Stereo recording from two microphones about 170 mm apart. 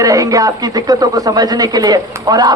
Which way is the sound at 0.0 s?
20° right (ahead or behind).